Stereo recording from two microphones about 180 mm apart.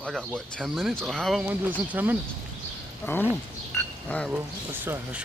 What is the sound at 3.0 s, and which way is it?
Speech, 10° left (ahead or behind).